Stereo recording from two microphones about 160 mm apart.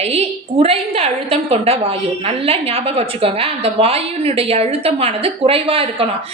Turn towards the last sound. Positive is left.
turn(degrees=-35)  # may be behind; listen again after turning